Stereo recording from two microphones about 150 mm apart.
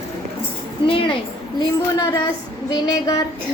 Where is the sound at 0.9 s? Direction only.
35° left (ahead or behind).